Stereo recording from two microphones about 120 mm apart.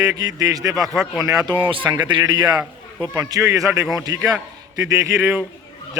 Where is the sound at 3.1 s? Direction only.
30° right (ahead or behind).